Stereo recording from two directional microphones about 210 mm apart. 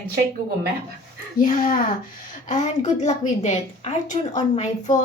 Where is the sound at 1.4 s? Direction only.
40° left (ahead or behind).